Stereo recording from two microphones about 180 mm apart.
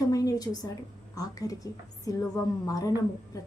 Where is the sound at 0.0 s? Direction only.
20° left (ahead or behind).